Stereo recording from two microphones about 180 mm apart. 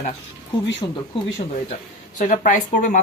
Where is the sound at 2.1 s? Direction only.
45° left (ahead or behind).